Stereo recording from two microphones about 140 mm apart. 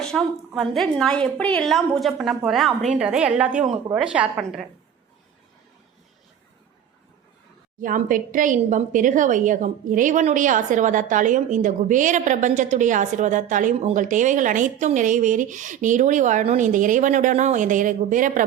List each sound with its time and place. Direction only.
0.0 s a woman's voice: 5° left (ahead or behind)
7.8 s a woman's voice: 75° right (ahead or behind)